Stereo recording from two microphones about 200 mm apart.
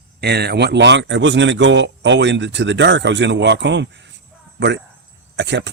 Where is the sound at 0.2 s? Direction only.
55° right (ahead or behind).